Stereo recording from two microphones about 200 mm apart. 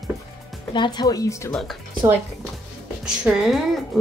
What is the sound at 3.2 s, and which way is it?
Speech, centre (ahead or behind).